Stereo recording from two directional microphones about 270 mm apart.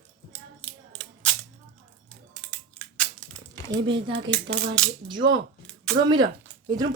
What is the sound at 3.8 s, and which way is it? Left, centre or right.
Speech, centre.